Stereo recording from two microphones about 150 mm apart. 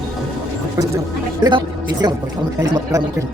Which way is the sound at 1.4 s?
25° right (ahead or behind).